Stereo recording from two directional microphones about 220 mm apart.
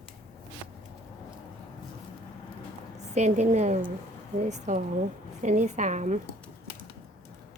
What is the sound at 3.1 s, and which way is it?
A woman's voice, 30° right (ahead or behind).